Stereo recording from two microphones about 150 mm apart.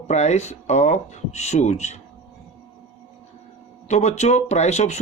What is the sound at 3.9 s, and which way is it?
Speech, 50° left (ahead or behind).